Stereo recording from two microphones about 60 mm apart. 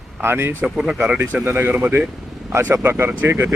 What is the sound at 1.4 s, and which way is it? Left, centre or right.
Speech, right.